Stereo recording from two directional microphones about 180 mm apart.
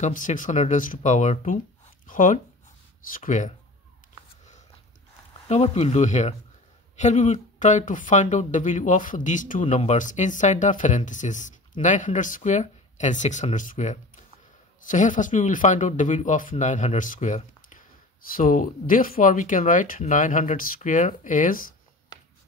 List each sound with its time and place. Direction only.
0.0 s speech: 45° left (ahead or behind)
5.5 s speech: 35° left (ahead or behind)